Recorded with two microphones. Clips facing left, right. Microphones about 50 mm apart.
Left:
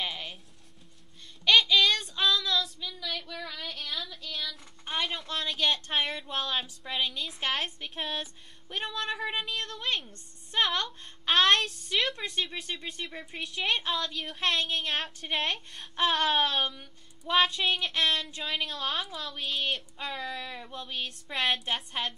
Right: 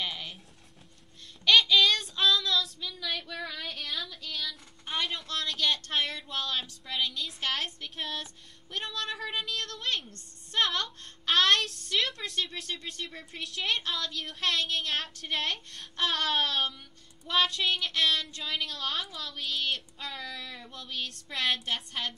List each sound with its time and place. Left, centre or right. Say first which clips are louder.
0.0 s a sound: left 1 dB; centre
1.5 s child singing: even; centre
10.5 s a woman's voice: left 1 dB; centre